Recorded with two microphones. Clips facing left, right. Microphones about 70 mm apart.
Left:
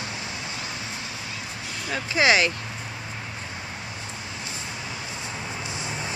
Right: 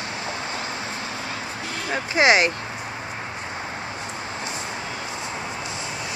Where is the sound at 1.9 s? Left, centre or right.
Right.